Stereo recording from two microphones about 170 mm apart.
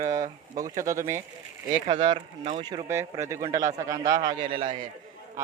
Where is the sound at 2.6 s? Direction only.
25° right (ahead or behind).